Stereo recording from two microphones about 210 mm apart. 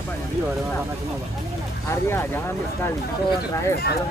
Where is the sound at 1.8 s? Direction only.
10° left (ahead or behind).